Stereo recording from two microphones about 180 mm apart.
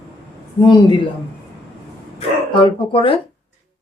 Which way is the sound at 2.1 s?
30° left (ahead or behind).